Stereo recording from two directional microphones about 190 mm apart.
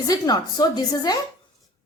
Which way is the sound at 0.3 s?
20° left (ahead or behind).